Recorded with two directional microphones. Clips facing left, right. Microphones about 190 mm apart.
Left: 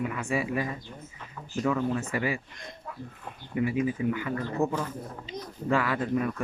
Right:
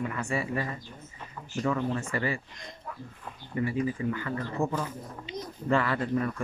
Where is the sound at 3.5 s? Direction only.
10° left (ahead or behind).